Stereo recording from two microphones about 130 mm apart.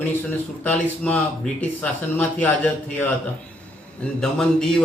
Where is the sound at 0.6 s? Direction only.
10° left (ahead or behind).